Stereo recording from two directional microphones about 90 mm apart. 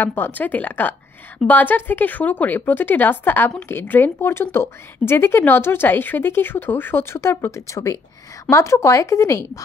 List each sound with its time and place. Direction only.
0.0 s a woman's voice: 20° left (ahead or behind)